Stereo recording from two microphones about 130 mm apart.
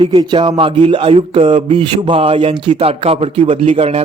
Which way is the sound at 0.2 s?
35° right (ahead or behind).